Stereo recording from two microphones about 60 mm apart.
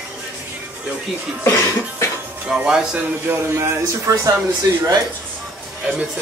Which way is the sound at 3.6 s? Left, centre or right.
Right.